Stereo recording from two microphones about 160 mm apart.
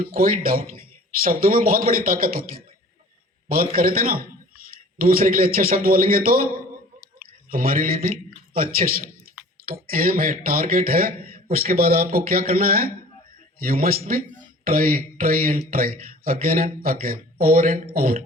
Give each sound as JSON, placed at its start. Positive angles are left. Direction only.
{"t": 0.0, "sound": "speech", "side_deg": -60}
{"t": 7.5, "sound": "a man's voice", "side_deg": -60}